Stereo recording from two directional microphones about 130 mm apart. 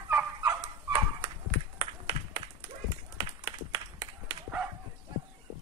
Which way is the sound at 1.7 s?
40° right (ahead or behind).